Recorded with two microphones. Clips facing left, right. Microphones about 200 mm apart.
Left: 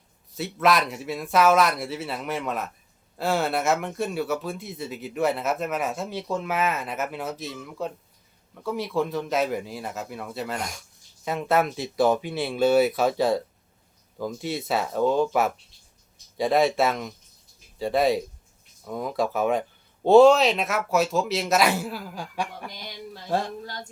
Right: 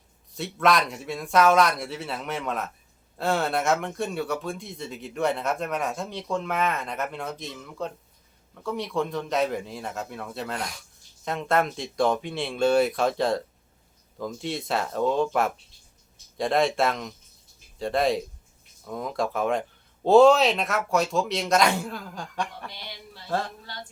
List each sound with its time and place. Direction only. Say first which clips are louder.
0.3 s speech: left 1 dB; centre (ahead or behind)
22.7 s speech: left 4 dB; 45° left (ahead or behind)